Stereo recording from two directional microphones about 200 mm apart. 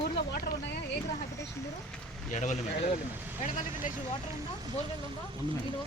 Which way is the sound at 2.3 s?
40° left (ahead or behind).